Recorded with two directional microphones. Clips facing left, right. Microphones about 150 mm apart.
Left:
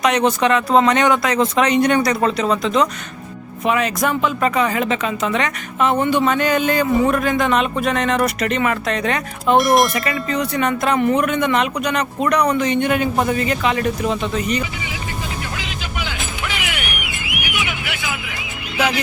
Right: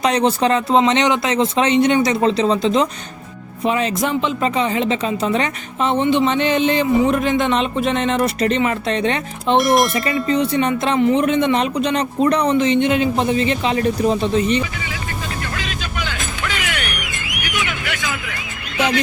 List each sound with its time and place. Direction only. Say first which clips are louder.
0.0 s speech: even; 30° right (ahead or behind)
0.8 s a woman's voice: left 2 dB; 20° right (ahead or behind)
9.6 s speech: even; centre (ahead or behind)
9.9 s a woman's voice: right 3 dB; 25° right (ahead or behind)
15.5 s music: right 1 dB; 15° left (ahead or behind)